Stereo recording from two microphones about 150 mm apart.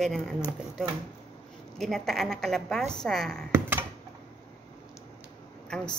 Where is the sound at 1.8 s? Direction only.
Centre (ahead or behind).